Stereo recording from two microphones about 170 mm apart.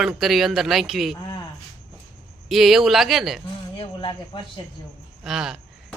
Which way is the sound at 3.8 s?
30° left (ahead or behind).